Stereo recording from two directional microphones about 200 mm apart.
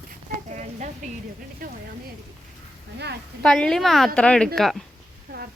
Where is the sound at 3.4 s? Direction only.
5° left (ahead or behind).